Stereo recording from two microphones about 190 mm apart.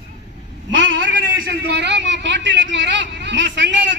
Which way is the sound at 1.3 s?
55° right (ahead or behind).